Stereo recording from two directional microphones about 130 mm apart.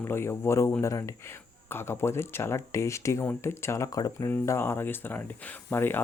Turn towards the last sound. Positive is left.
turn(degrees=15)  # may be behind; listen again after turning